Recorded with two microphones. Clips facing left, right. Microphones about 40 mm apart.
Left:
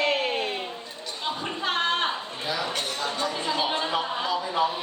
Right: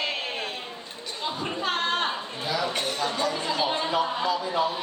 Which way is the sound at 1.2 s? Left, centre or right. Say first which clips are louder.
Left 1 dB; centre.